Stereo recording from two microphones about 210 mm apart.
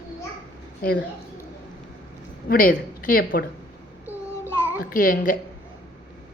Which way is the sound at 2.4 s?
40° left (ahead or behind).